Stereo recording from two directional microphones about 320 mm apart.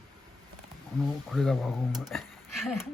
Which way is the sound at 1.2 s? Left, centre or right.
Centre.